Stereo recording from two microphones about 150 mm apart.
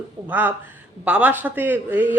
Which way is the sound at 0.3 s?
10° right (ahead or behind).